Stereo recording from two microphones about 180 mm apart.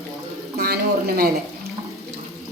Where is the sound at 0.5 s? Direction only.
60° right (ahead or behind).